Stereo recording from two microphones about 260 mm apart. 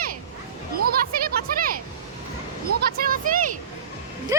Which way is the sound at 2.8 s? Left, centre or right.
Right.